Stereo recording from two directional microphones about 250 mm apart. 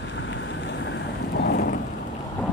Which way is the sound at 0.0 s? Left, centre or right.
Left.